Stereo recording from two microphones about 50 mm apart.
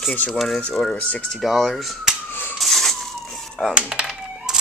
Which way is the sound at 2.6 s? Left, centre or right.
Centre.